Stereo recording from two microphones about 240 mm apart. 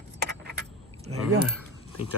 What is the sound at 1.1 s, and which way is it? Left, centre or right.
Speech, right.